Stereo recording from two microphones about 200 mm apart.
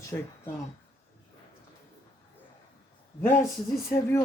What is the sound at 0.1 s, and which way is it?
Speech, 15° left (ahead or behind).